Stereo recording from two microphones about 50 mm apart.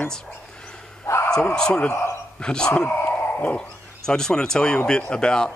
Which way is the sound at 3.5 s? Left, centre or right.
Centre.